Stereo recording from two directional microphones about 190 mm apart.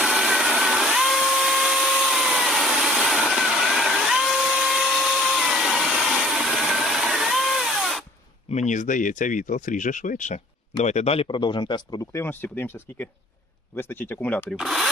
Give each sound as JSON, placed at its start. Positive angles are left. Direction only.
{"t": 0.0, "sound": "a sound", "side_deg": 0}
{"t": 8.4, "sound": "speech", "side_deg": 40}
{"t": 14.5, "sound": "speech", "side_deg": 0}